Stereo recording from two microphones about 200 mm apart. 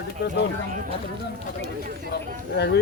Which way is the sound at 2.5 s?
55° left (ahead or behind).